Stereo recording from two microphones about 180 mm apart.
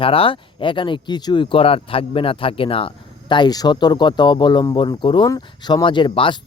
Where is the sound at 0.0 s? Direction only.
30° left (ahead or behind).